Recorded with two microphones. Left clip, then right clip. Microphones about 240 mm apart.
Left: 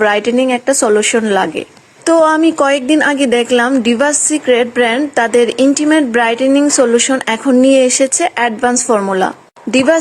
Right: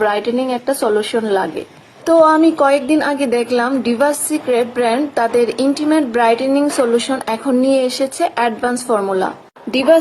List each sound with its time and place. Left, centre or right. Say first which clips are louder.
0.0 s a woman's voice: left 5 dB; left